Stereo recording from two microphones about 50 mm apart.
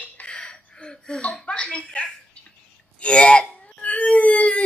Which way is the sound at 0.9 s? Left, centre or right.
Centre.